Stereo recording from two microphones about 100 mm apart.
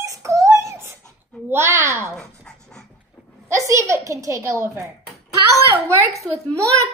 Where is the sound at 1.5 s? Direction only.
25° right (ahead or behind).